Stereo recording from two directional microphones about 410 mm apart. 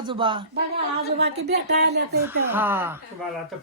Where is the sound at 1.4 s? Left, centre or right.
Right.